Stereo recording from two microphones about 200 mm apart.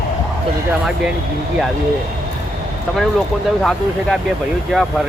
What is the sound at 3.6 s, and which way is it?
Speech, centre (ahead or behind).